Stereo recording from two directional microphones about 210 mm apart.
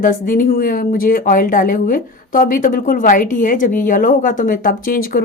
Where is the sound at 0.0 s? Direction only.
40° left (ahead or behind).